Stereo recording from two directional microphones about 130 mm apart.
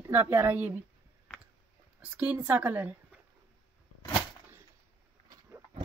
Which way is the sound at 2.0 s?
10° right (ahead or behind).